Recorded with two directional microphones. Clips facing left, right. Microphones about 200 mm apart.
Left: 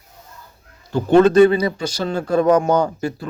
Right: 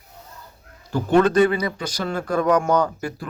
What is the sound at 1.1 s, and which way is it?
A man's voice, 25° left (ahead or behind).